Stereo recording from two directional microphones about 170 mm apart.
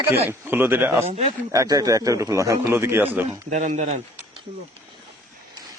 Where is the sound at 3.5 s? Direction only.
45° right (ahead or behind).